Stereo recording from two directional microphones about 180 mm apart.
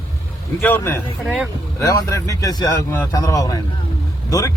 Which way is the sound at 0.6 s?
10° left (ahead or behind).